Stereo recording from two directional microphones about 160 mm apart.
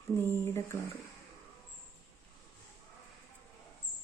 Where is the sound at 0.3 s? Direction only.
15° left (ahead or behind).